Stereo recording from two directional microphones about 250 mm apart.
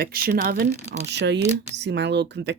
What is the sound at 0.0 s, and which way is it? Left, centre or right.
Speech, right.